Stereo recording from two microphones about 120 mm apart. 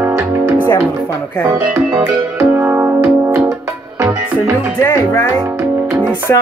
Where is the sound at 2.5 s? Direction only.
15° right (ahead or behind).